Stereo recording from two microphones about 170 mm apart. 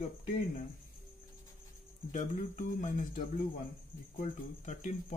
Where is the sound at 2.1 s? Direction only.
45° left (ahead or behind).